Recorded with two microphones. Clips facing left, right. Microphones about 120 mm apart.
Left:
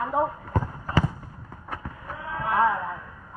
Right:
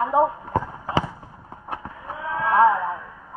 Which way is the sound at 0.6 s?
20° right (ahead or behind).